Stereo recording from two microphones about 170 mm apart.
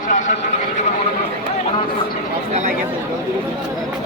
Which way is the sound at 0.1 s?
45° left (ahead or behind).